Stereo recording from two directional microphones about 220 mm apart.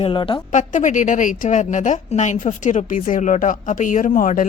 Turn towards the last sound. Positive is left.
turn(degrees=35)  # may be behind; listen again after turning